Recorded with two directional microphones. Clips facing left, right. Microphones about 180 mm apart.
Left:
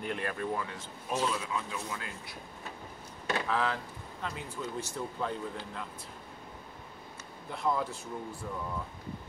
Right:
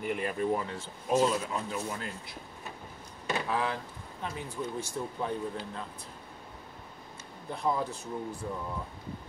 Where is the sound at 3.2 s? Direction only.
10° right (ahead or behind).